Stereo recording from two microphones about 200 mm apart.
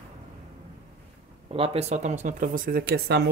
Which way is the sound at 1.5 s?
30° right (ahead or behind).